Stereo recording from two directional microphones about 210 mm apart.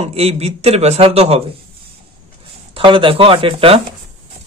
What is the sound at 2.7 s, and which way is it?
Speech, 25° right (ahead or behind).